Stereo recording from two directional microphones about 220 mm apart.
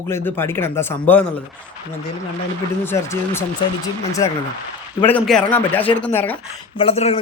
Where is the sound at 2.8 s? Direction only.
10° left (ahead or behind).